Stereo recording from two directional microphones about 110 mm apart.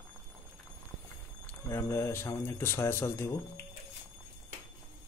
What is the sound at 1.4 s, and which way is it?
A man's voice, 25° left (ahead or behind).